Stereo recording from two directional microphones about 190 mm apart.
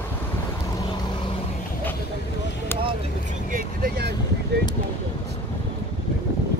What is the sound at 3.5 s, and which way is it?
Vehicle, 50° right (ahead or behind).